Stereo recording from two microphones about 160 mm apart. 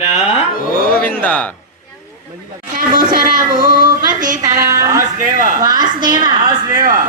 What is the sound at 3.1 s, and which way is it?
Speech, 60° right (ahead or behind).